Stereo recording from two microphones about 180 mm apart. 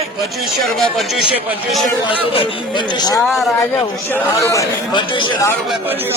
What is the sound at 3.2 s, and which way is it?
Speech, centre (ahead or behind).